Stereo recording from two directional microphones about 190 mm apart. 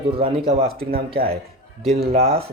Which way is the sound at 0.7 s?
55° right (ahead or behind).